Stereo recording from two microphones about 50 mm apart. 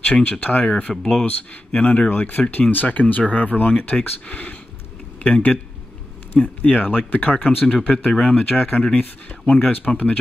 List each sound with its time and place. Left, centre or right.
0.0 s speech: left
2.0 s speech: left
7.6 s speech: left